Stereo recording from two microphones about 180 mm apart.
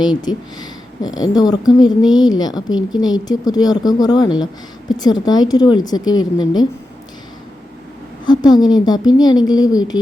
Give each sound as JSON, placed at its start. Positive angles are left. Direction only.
{"t": 0.2, "sound": "speech", "side_deg": 20}
{"t": 8.3, "sound": "speech", "side_deg": 25}